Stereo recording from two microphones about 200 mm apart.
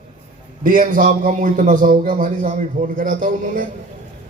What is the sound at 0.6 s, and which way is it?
A man's voice, 40° right (ahead or behind).